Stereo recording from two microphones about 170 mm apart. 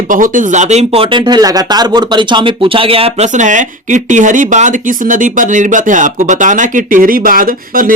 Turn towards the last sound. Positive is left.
turn(degrees=-55)  # may be behind; listen again after turning